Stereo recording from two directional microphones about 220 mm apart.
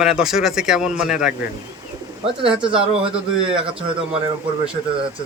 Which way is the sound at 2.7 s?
25° right (ahead or behind).